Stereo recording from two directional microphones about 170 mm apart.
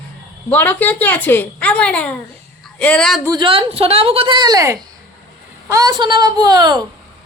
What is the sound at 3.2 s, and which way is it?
A woman's voice, 25° right (ahead or behind).